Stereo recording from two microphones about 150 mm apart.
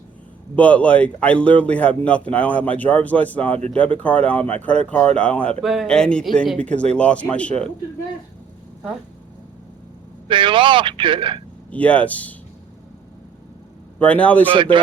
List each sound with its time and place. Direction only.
0.5 s speech: 10° left (ahead or behind)
10.2 s speech: 35° right (ahead or behind)
11.7 s speech: 10° left (ahead or behind)
14.0 s speech: 10° left (ahead or behind)
14.4 s speech: 35° right (ahead or behind)